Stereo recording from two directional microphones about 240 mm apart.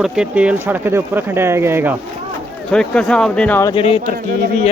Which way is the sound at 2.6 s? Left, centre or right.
Centre.